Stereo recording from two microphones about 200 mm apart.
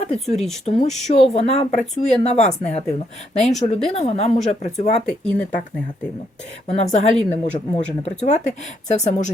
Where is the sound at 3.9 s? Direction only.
30° left (ahead or behind).